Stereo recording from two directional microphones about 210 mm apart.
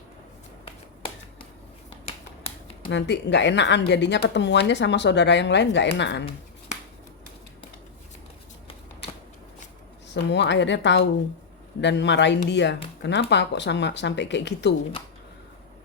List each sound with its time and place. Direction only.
0.6 s finger snapping: 25° left (ahead or behind)
2.9 s speech: 55° left (ahead or behind)
10.2 s speech: 55° left (ahead or behind)